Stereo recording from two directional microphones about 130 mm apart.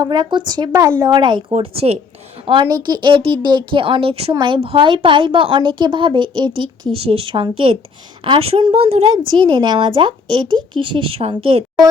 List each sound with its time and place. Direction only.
0.0 s a woman's voice: 30° right (ahead or behind)
1.1 s a woman's voice: 40° right (ahead or behind)
2.5 s a woman's voice: 35° right (ahead or behind)
9.1 s a woman's voice: 35° right (ahead or behind)